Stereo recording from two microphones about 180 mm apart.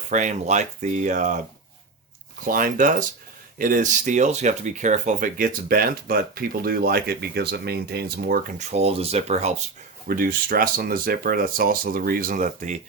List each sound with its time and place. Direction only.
0.1 s speech: 40° right (ahead or behind)
2.4 s speech: 50° right (ahead or behind)
10.1 s speech: 55° right (ahead or behind)